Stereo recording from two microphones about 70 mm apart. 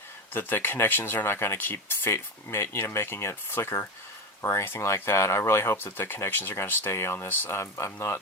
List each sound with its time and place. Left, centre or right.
0.3 s speech: left